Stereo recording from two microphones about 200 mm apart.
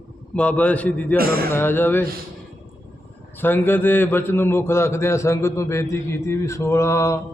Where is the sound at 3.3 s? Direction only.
10° left (ahead or behind).